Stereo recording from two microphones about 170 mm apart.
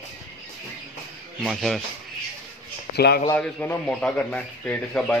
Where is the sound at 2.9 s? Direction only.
70° left (ahead or behind).